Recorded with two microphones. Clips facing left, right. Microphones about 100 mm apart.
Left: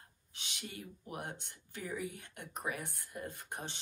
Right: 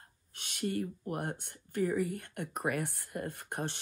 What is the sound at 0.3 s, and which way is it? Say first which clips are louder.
Speech: right 13 dB; 50° right (ahead or behind).